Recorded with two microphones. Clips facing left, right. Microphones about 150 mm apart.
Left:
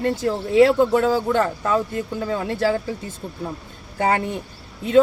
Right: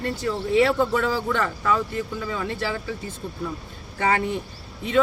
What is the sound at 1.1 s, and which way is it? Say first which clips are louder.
Speech: left 5 dB; 40° left (ahead or behind).